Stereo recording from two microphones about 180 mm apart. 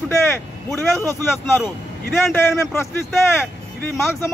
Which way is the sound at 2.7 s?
15° left (ahead or behind).